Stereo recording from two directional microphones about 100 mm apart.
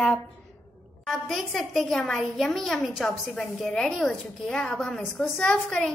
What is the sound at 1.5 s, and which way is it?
A woman's voice, 5° left (ahead or behind).